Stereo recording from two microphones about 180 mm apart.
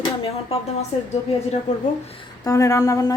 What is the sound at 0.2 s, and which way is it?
Speech, 35° left (ahead or behind).